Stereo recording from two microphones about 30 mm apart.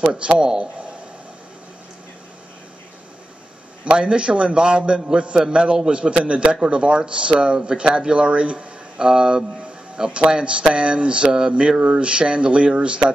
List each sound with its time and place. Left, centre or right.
0.4 s speech: right
4.0 s speech: right
9.0 s speech: right